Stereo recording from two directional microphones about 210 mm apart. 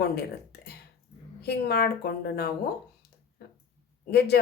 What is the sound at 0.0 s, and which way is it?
Speech, 50° left (ahead or behind).